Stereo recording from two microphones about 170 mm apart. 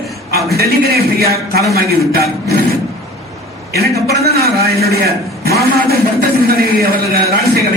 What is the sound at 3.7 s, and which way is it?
A man's voice, 65° right (ahead or behind).